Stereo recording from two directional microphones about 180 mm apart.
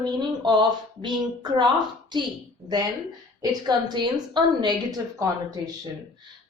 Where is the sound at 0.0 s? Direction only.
25° right (ahead or behind).